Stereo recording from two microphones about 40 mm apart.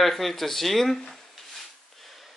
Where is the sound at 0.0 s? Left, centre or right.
Centre.